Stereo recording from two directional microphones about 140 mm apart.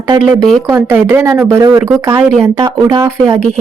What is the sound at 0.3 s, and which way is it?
Speech, 20° right (ahead or behind).